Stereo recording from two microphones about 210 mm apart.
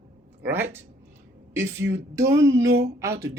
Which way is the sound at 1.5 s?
15° right (ahead or behind).